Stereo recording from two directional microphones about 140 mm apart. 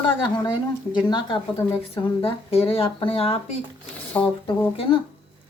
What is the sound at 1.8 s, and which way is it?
Speech, 40° left (ahead or behind).